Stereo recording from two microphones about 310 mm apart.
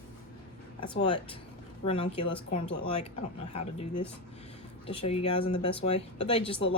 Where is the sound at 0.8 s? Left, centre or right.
Centre.